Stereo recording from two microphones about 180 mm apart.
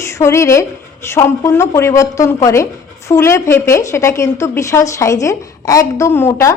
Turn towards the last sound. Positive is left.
turn(degrees=15)  # may be behind; listen again after turning